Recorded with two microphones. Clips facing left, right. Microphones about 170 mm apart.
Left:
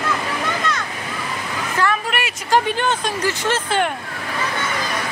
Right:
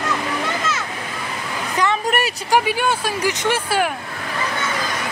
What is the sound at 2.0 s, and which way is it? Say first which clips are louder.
Speech: right 4 dB; 45° right (ahead or behind).